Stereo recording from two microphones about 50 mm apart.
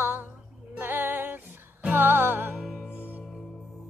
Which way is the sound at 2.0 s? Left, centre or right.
Right.